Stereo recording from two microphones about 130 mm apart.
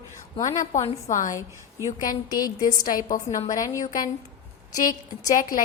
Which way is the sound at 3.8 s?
90° left.